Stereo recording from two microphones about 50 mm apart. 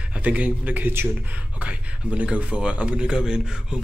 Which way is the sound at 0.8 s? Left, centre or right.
Right.